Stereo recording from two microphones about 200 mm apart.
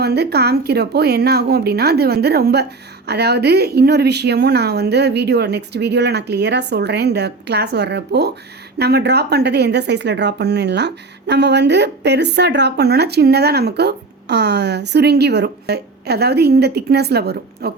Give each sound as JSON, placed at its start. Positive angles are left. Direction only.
{"t": 0.0, "sound": "a woman's voice", "side_deg": -55}